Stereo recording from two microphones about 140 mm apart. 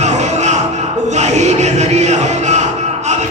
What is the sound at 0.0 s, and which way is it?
Music, 55° right (ahead or behind).